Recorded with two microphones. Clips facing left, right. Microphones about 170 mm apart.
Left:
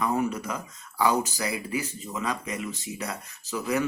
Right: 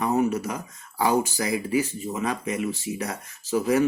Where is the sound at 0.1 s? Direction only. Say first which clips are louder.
Right 4 dB; 40° right (ahead or behind).